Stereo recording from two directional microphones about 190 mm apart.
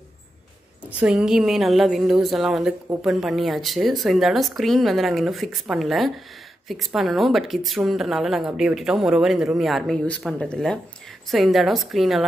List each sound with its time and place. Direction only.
0.8 s speech: 5° right (ahead or behind)